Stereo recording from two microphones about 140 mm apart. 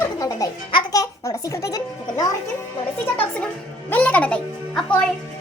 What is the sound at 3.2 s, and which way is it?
Music, 10° left (ahead or behind).